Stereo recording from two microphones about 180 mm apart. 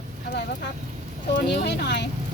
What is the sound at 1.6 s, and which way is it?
Speech, 70° left (ahead or behind).